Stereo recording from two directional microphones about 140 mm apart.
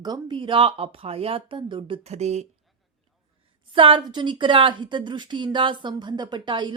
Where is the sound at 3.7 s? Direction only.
35° right (ahead or behind).